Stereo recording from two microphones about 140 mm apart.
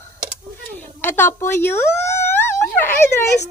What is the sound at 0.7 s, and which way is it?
Speech, 15° left (ahead or behind).